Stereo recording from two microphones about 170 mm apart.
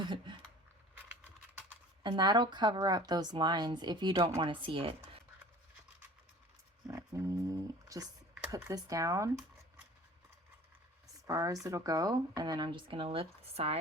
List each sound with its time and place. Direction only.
0.0 s a sound: 25° right (ahead or behind)
2.0 s speech: 25° right (ahead or behind)
6.8 s roaring cats: 15° right (ahead or behind)
8.4 s speech: 20° right (ahead or behind)
11.3 s speech: 20° right (ahead or behind); by 13.7 s 35° right (ahead or behind)